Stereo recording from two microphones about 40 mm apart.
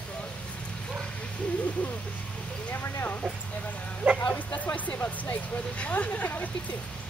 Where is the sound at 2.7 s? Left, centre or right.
Left.